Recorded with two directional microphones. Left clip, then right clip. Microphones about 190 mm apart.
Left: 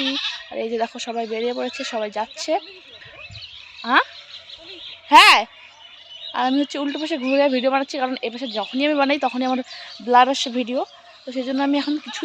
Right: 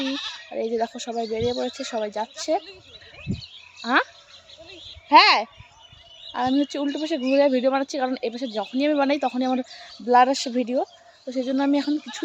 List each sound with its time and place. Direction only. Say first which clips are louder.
0.0 s speech: left 5 dB; 45° right (ahead or behind)
0.5 s speech: right 1 dB; centre (ahead or behind)
3.8 s speech: left 4 dB; 10° right (ahead or behind)
5.0 s speech: left 4 dB; 5° left (ahead or behind)